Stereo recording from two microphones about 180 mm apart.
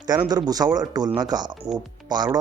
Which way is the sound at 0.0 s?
25° right (ahead or behind).